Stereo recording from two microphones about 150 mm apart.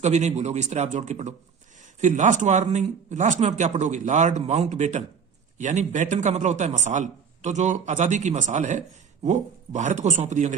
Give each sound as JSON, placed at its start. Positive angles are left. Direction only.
{"t": 0.0, "sound": "speech", "side_deg": -50}